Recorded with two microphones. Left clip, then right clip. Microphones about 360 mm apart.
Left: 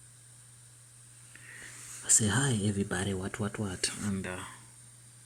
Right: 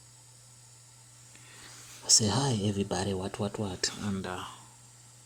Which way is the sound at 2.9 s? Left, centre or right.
Right.